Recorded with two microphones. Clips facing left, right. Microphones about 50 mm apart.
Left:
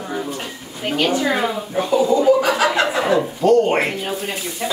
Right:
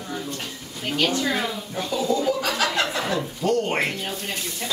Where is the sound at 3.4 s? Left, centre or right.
Centre.